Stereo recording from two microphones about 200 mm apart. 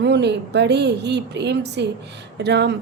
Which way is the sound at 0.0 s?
60° right (ahead or behind).